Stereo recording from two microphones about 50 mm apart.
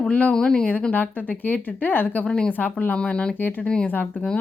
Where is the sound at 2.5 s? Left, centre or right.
Left.